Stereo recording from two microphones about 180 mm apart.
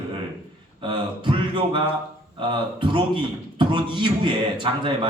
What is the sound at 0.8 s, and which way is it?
A man's voice, 30° right (ahead or behind).